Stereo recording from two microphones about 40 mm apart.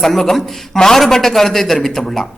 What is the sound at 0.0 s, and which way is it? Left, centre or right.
A man's voice, centre.